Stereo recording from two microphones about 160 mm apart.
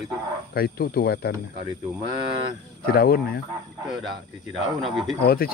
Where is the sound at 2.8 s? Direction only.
70° left (ahead or behind).